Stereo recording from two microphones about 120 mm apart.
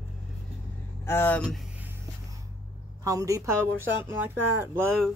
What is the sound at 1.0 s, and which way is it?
Speech, 20° left (ahead or behind).